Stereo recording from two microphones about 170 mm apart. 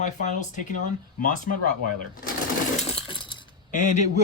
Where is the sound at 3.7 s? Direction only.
45° left (ahead or behind).